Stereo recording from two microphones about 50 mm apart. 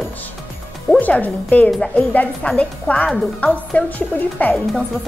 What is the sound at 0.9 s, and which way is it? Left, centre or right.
A woman's voice, left.